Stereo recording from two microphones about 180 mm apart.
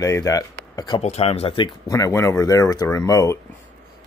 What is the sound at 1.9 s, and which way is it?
Speech, 15° left (ahead or behind).